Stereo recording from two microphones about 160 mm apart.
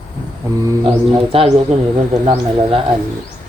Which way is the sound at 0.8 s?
35° right (ahead or behind).